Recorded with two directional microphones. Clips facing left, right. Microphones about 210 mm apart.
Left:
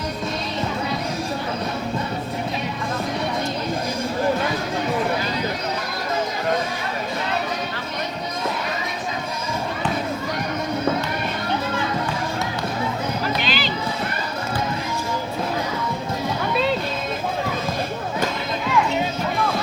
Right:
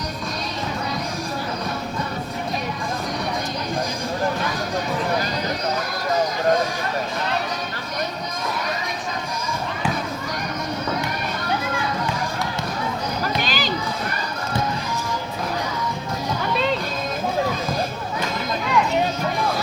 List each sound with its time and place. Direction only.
13.4 s run: 45° right (ahead or behind)